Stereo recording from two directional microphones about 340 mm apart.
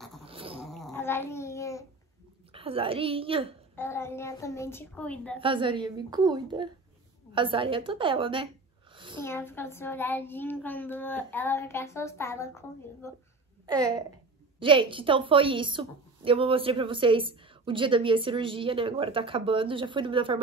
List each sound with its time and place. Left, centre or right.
0.2 s dog: centre
0.6 s a sound: centre
2.5 s a woman's voice: centre
3.7 s a child's voice: centre
5.4 s a woman's voice: centre
8.9 s a sound: centre
9.2 s a child's voice: centre
13.7 s a woman's voice: centre